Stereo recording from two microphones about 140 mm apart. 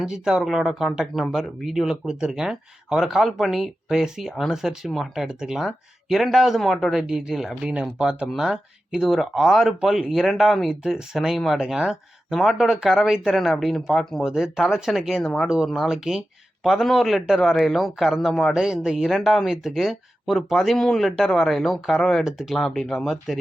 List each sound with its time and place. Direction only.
0.0 s speech: centre (ahead or behind)